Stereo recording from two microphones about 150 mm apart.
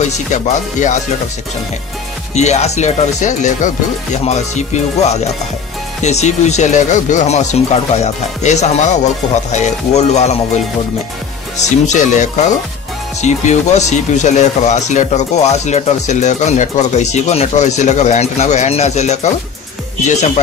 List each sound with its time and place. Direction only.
0.0 s speech: 55° left (ahead or behind)
2.3 s speech: 50° left (ahead or behind)
11.9 s speech: 55° left (ahead or behind)